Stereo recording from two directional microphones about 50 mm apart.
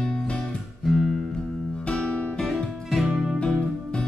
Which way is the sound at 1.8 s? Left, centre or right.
Centre.